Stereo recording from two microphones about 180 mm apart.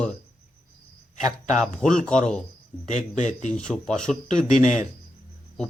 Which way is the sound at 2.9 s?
45° left (ahead or behind).